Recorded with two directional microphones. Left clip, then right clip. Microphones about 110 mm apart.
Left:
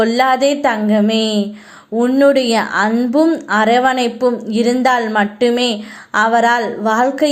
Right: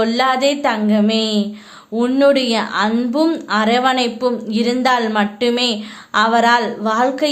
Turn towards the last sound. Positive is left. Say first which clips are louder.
# left 2 dB
turn(degrees=30)  # may be behind; listen again after turning